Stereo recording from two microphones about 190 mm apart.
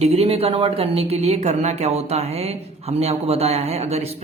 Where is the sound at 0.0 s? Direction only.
30° right (ahead or behind).